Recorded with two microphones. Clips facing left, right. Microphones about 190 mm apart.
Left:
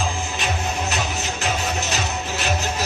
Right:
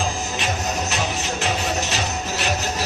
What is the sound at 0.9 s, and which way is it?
Music, 40° left (ahead or behind).